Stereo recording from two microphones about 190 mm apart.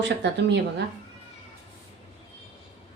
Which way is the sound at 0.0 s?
65° right (ahead or behind).